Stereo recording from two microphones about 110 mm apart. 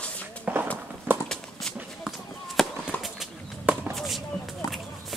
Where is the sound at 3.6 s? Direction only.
10° right (ahead or behind).